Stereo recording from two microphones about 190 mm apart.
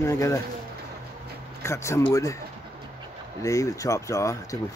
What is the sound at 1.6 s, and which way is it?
Speech, 15° left (ahead or behind).